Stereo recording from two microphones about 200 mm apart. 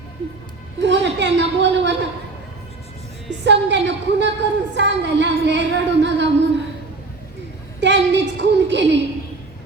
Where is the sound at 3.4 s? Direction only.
60° right (ahead or behind).